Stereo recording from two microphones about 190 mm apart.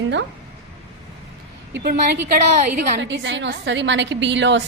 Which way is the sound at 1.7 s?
60° right (ahead or behind).